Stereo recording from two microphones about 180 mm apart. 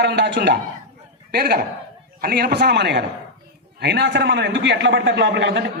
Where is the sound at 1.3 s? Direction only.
60° right (ahead or behind).